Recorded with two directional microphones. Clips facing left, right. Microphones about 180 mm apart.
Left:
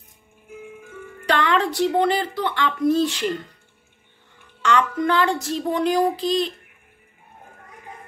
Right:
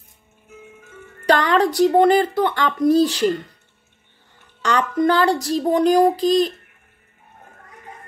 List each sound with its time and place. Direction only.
1.2 s speech: 40° right (ahead or behind)
4.6 s speech: 40° right (ahead or behind)